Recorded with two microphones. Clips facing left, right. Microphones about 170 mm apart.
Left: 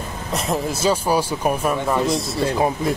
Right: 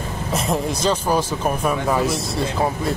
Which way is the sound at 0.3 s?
Centre (ahead or behind).